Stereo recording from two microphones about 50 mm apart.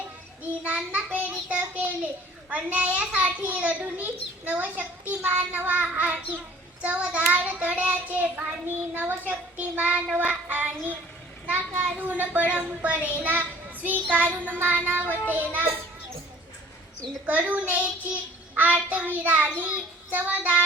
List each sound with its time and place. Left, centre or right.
0.9 s child singing: right
3.2 s a child's voice: right
3.8 s child singing: right
5.2 s a child's voice: right
5.8 s child singing: right
7.3 s a child's voice: right
13.1 s a child's voice: right
13.4 s child singing: right
14.6 s a child's voice: right
17.2 s child singing: right